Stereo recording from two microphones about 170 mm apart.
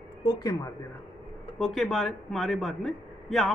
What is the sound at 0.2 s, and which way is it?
Speech, 20° left (ahead or behind).